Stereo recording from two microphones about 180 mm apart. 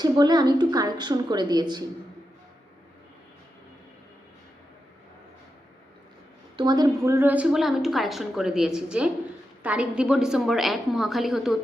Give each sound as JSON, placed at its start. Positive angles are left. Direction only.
{"t": 0.0, "sound": "a woman's voice", "side_deg": -25}
{"t": 6.6, "sound": "a woman's voice", "side_deg": -25}